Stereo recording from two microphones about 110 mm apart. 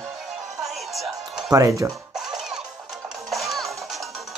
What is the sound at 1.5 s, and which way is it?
Speech, 30° right (ahead or behind).